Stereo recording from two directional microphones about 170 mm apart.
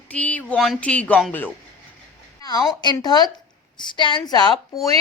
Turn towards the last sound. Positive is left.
turn(degrees=25)  # may be behind; listen again after turning